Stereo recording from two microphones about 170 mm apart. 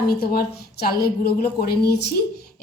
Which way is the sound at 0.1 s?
65° left (ahead or behind).